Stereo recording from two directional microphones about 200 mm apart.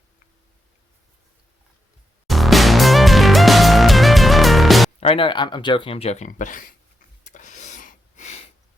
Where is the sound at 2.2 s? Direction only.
Centre (ahead or behind).